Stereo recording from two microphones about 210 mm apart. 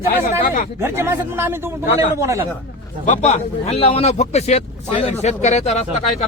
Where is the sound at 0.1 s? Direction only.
40° left (ahead or behind).